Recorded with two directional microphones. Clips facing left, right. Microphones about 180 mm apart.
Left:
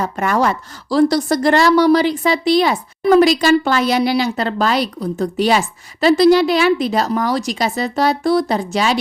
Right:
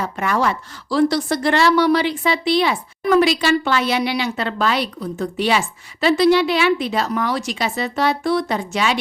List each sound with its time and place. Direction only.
0.0 s a woman's voice: 45° left (ahead or behind)